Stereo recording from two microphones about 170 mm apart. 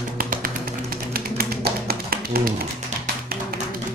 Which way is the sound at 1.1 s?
65° right (ahead or behind).